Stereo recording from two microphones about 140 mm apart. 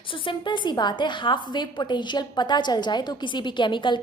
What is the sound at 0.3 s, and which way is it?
A woman's voice, 35° left (ahead or behind).